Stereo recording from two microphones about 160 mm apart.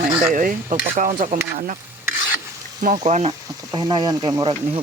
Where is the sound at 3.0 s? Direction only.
45° right (ahead or behind).